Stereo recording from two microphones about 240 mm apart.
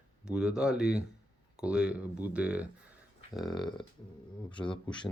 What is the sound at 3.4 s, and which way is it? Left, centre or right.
Speech, centre.